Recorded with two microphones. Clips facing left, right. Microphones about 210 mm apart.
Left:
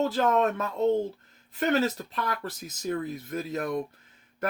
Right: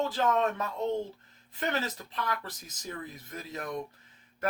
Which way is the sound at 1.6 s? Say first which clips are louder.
Left 8 dB; 50° left (ahead or behind).